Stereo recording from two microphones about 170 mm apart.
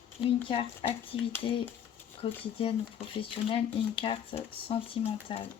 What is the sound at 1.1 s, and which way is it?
Speech, 30° left (ahead or behind).